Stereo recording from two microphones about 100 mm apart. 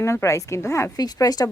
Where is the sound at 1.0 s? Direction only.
40° left (ahead or behind).